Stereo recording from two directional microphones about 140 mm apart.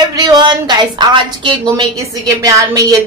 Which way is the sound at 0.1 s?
30° right (ahead or behind).